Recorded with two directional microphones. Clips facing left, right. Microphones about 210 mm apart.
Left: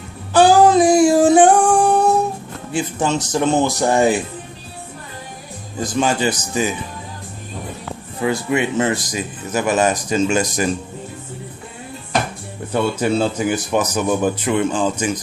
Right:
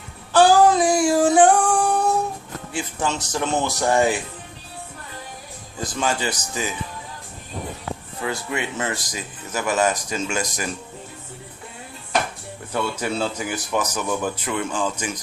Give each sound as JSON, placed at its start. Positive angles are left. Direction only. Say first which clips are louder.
{"t": 0.3, "sound": "female singing", "louder": "left 3 dB", "side_deg": 20}
{"t": 2.7, "sound": "speech", "louder": "left 6 dB", "side_deg": 20}
{"t": 6.0, "sound": "speech", "louder": "left 6 dB", "side_deg": 20}
{"t": 8.2, "sound": "speech", "louder": "left 8 dB", "side_deg": 15}
{"t": 12.7, "sound": "speech", "louder": "left 7 dB", "side_deg": 25}